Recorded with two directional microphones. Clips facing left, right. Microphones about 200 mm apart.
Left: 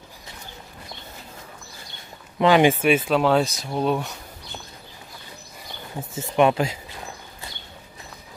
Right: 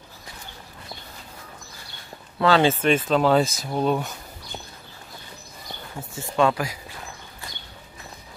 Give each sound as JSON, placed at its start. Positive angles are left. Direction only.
{"t": 2.3, "sound": "speech", "side_deg": 15}
{"t": 5.9, "sound": "speech", "side_deg": 20}